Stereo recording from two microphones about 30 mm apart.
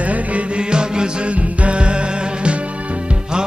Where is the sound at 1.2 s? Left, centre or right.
Right.